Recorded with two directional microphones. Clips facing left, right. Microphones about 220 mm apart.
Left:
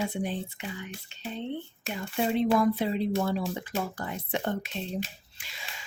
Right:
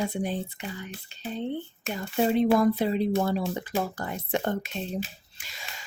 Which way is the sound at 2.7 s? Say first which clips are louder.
Right 3 dB; 40° right (ahead or behind).